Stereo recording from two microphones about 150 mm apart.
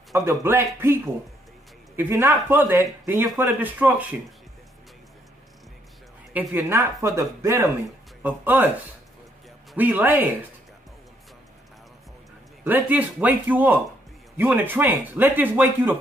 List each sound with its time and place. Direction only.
0.1 s speech: 20° right (ahead or behind)
6.3 s speech: 15° right (ahead or behind)
12.6 s speech: 10° right (ahead or behind)